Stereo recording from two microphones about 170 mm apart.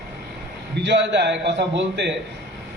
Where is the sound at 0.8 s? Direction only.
90° right.